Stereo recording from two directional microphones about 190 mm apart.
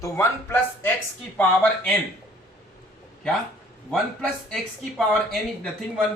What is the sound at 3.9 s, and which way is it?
Speech, centre (ahead or behind).